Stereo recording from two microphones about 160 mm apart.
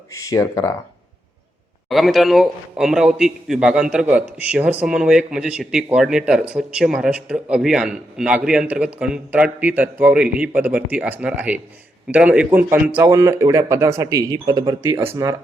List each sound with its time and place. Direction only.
0.1 s speech: 20° left (ahead or behind)
1.9 s a man's voice: centre (ahead or behind); by 15.4 s 15° right (ahead or behind)